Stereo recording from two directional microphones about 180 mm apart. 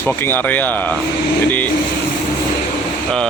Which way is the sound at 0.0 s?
10° left (ahead or behind).